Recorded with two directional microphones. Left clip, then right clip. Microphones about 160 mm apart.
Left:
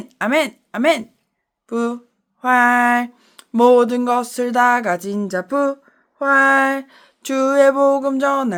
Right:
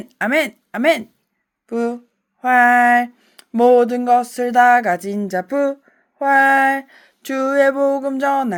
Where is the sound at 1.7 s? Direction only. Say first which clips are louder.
Right 1 dB; 10° right (ahead or behind).